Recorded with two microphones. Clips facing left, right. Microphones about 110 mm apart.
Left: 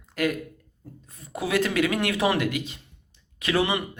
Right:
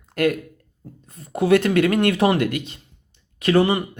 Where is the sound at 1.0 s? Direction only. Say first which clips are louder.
Right 9 dB; 50° right (ahead or behind).